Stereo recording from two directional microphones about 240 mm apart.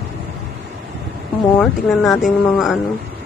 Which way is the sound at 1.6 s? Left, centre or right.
Centre.